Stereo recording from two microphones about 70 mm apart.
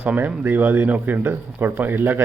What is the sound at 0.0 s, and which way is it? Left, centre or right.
Speech, right.